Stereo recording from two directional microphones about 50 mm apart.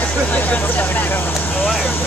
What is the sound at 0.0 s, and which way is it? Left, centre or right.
Vehicle, left.